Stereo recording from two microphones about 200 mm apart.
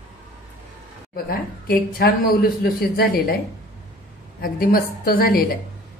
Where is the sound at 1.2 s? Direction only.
45° left (ahead or behind).